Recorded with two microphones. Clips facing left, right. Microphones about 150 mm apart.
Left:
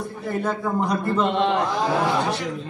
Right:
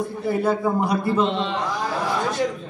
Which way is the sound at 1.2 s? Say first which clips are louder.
Left 2 dB; 55° left (ahead or behind).